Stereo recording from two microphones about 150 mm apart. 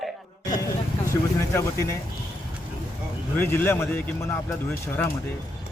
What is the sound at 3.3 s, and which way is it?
Speech, 15° left (ahead or behind).